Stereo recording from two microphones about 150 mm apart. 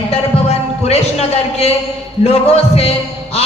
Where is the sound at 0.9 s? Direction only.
45° left (ahead or behind).